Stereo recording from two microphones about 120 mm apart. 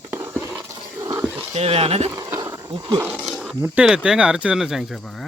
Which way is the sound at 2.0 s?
20° right (ahead or behind).